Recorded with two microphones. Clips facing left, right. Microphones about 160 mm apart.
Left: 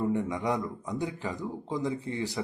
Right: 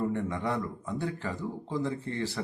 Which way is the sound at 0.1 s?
15° left (ahead or behind).